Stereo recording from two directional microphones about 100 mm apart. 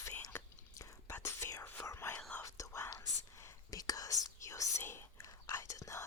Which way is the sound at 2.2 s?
15° left (ahead or behind).